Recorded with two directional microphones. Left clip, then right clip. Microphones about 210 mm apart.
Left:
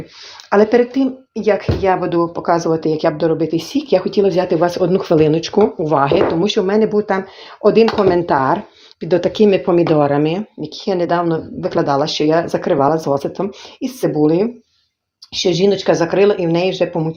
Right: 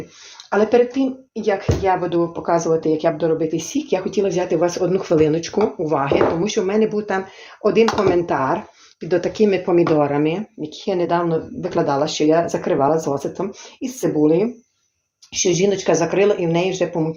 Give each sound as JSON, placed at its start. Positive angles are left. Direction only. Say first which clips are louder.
{"t": 0.5, "sound": "speech", "louder": "left 3 dB", "side_deg": 35}